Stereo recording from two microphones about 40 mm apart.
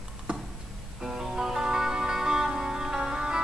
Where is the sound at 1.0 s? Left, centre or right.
Centre.